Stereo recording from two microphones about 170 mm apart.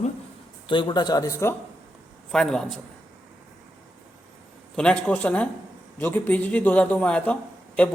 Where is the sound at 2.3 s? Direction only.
5° left (ahead or behind).